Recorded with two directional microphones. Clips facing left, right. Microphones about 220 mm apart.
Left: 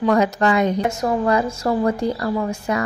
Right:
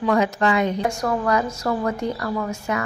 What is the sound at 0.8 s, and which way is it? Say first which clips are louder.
A woman's voice: left 3 dB; 25° left (ahead or behind).